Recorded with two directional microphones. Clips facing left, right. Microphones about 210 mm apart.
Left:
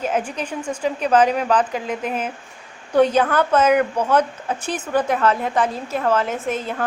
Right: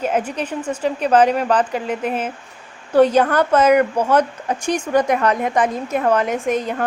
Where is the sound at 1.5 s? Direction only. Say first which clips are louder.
Right 1 dB; 10° right (ahead or behind).